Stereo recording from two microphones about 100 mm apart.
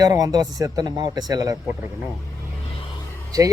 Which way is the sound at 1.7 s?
25° right (ahead or behind).